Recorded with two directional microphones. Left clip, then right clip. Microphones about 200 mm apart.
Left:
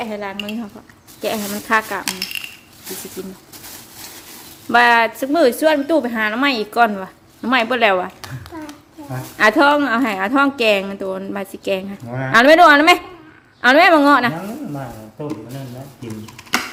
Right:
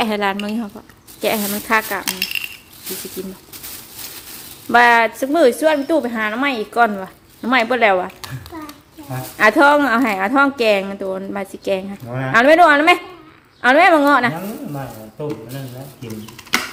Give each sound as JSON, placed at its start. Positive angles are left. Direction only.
{"t": 0.0, "sound": "a woman's voice", "side_deg": -35}
{"t": 1.2, "sound": "speech", "side_deg": -15}
{"t": 1.7, "sound": "a woman's voice", "side_deg": -5}
{"t": 2.0, "sound": "a woman's voice", "side_deg": 5}
{"t": 3.2, "sound": "speech", "side_deg": -10}
{"t": 4.7, "sound": "a woman's voice", "side_deg": -10}
{"t": 9.4, "sound": "a woman's voice", "side_deg": -5}
{"t": 14.7, "sound": "speech", "side_deg": -15}